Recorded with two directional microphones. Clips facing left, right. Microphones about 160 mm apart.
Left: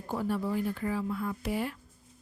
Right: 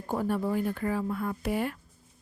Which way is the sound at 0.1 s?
50° right (ahead or behind).